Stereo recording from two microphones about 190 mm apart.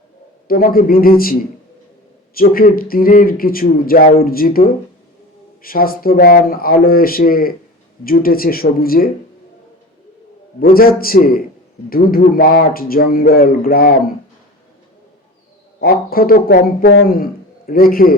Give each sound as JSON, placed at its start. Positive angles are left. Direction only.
{"t": 0.4, "sound": "speech", "side_deg": 50}
{"t": 10.6, "sound": "speech", "side_deg": 50}
{"t": 15.8, "sound": "speech", "side_deg": 50}